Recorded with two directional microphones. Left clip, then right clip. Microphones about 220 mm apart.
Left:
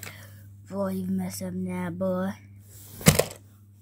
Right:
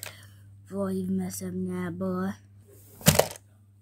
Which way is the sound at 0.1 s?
15° left (ahead or behind).